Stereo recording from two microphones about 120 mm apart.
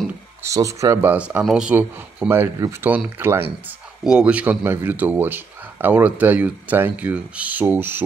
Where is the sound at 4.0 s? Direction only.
5° right (ahead or behind).